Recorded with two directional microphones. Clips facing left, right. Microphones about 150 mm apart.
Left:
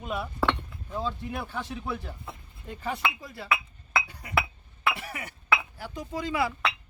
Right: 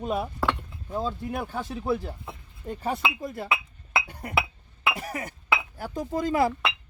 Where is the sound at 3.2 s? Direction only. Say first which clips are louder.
Right 2 dB; 50° right (ahead or behind).